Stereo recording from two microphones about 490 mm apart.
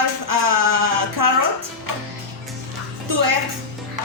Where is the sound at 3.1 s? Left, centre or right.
Right.